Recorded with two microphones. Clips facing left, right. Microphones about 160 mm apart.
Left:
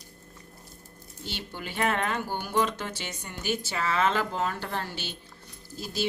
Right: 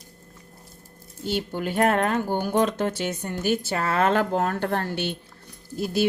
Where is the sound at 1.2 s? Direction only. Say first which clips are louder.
Right 11 dB; 45° right (ahead or behind).